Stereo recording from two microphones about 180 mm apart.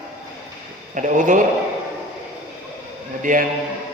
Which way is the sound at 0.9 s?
45° right (ahead or behind).